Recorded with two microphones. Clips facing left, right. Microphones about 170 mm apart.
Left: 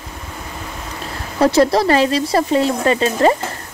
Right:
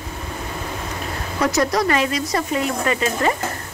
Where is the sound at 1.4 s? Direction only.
30° left (ahead or behind).